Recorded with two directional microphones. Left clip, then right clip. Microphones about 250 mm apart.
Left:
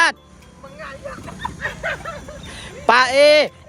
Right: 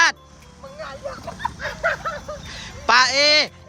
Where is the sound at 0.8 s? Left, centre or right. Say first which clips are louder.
Right 1 dB; right.